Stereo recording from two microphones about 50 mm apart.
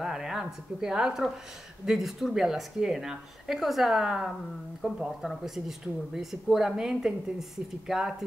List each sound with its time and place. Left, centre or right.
0.0 s speech: centre
4.8 s speech: right
5.2 s speech: centre